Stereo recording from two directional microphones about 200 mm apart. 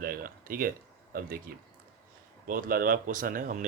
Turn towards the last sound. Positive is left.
turn(degrees=-40)  # may be behind; listen again after turning